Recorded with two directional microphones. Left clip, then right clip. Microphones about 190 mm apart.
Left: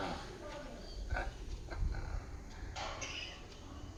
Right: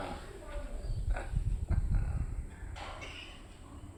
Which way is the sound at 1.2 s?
15° right (ahead or behind).